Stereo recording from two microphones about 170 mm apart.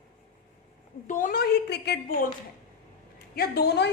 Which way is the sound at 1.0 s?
50° left (ahead or behind).